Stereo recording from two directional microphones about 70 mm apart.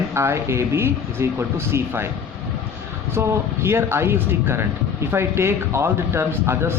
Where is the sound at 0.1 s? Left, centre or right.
Right.